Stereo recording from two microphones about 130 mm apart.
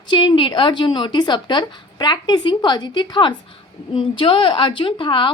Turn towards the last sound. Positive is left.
turn(degrees=40)  # may be behind; listen again after turning